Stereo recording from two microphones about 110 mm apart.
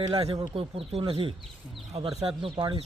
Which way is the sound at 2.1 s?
60° right (ahead or behind).